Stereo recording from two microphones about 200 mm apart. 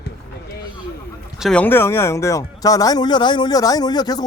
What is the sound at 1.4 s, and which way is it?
A man's voice, 5° left (ahead or behind).